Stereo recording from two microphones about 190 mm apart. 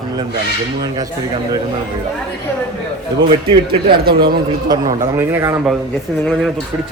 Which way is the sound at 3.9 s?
55° right (ahead or behind).